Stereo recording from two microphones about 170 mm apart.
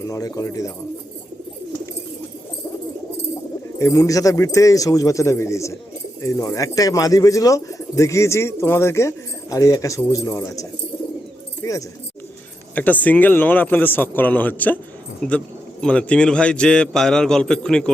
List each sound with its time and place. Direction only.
0.1 s speech: 20° left (ahead or behind)
3.8 s a man's voice: 20° left (ahead or behind)